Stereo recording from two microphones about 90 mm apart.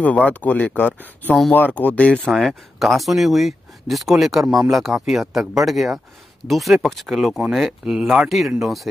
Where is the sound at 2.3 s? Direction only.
Centre (ahead or behind).